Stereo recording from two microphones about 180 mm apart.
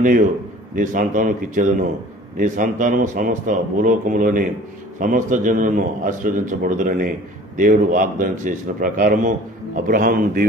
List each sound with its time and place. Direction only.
0.0 s a man's voice: 50° right (ahead or behind)